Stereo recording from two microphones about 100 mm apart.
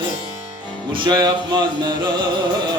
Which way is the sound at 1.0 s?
45° right (ahead or behind).